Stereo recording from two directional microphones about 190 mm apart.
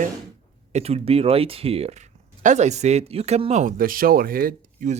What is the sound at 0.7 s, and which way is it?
Speech, 35° right (ahead or behind).